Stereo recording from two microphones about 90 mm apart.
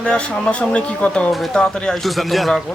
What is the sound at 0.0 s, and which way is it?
Speech, 10° left (ahead or behind).